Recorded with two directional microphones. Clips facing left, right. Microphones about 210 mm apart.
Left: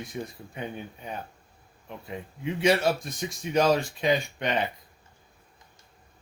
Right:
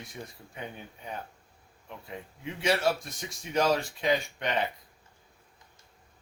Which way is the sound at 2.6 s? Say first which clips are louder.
Left 4 dB; 20° left (ahead or behind).